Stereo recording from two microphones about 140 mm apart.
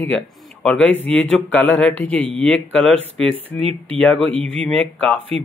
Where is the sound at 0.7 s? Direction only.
10° left (ahead or behind).